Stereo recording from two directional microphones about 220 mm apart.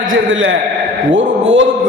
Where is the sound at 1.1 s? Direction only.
60° right (ahead or behind).